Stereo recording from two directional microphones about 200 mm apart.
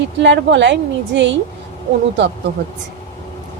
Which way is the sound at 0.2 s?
60° right (ahead or behind).